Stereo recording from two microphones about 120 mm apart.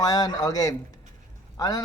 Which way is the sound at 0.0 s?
30° left (ahead or behind).